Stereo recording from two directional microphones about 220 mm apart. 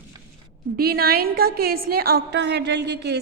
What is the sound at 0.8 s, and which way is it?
A woman's voice, 45° right (ahead or behind).